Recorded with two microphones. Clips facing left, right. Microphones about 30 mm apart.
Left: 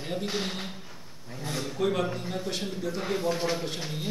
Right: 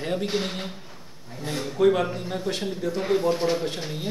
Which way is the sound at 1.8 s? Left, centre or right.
Centre.